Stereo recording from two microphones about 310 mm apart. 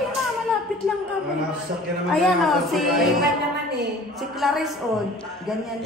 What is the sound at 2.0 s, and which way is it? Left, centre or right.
A man's voice, centre.